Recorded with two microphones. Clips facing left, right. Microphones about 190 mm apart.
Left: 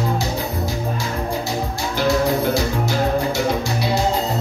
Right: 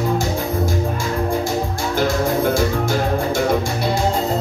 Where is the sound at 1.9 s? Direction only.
50° right (ahead or behind).